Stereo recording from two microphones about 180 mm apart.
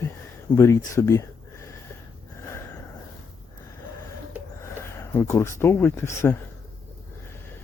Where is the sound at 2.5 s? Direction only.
15° left (ahead or behind).